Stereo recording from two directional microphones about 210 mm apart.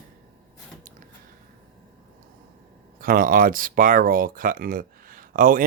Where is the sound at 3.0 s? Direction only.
40° right (ahead or behind).